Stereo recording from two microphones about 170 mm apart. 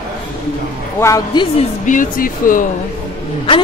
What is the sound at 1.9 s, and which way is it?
Speech, 55° left (ahead or behind).